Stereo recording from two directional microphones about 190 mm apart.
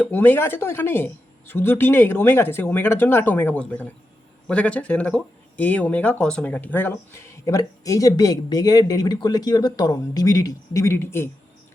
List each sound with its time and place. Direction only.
0.0 s speech: 10° left (ahead or behind)